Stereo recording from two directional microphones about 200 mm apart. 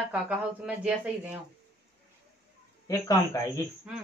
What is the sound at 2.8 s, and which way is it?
Speech, 20° left (ahead or behind).